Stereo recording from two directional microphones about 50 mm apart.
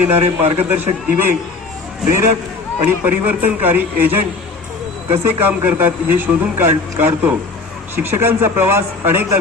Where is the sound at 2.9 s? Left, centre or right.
Right.